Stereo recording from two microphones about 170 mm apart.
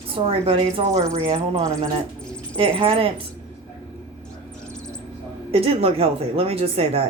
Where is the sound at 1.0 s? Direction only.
20° right (ahead or behind).